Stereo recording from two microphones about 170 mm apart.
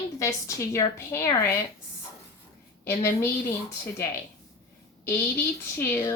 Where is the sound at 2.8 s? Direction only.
15° left (ahead or behind).